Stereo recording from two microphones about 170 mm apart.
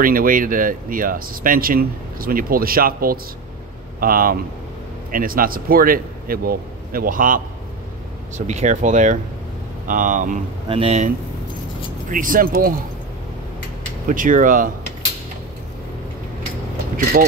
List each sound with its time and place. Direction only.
0.0 s speech: 55° right (ahead or behind)
8.4 s speech: 40° right (ahead or behind)
10.7 s speech: 35° right (ahead or behind)
12.1 s speech: 55° right (ahead or behind)
14.0 s speech: 50° right (ahead or behind)
16.9 s speech: 55° right (ahead or behind)